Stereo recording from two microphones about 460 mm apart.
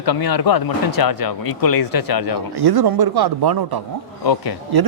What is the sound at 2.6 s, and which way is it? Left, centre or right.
Speech, right.